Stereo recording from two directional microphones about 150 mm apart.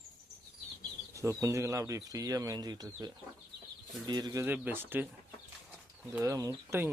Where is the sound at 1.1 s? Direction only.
20° right (ahead or behind).